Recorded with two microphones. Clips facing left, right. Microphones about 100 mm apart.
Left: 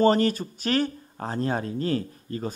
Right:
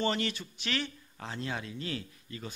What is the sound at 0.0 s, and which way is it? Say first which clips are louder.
Speech: left 11 dB; 40° left (ahead or behind).